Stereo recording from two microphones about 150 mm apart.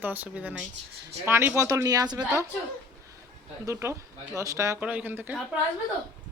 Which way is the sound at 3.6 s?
20° right (ahead or behind).